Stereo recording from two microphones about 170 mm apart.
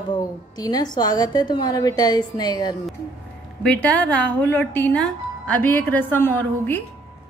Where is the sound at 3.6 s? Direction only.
5° left (ahead or behind).